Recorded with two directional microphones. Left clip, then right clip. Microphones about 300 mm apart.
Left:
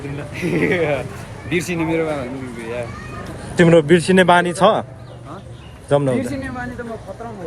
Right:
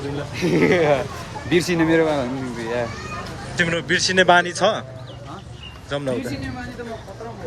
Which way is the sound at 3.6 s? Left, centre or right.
Centre.